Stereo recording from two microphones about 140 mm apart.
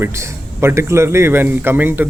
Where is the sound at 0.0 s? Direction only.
20° right (ahead or behind).